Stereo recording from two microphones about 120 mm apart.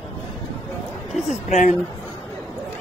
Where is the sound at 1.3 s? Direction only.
80° left.